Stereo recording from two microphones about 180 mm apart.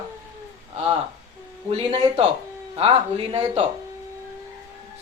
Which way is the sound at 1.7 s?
35° right (ahead or behind).